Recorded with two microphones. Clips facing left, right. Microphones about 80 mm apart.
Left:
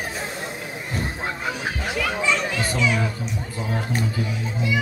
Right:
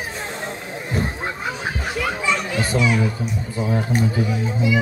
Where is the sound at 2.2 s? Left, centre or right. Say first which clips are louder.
Right 1 dB; centre.